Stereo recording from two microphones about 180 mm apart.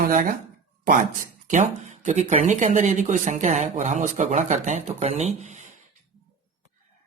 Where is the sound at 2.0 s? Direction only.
40° right (ahead or behind).